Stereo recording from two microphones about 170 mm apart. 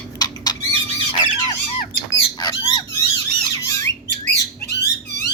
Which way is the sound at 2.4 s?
25° left (ahead or behind).